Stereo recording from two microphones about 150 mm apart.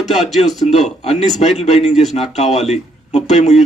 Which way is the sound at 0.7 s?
45° left (ahead or behind).